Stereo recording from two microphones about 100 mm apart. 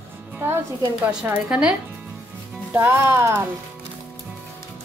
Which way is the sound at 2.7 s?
20° right (ahead or behind).